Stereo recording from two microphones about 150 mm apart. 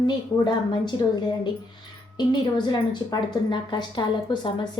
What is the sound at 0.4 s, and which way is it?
Speech, 30° left (ahead or behind).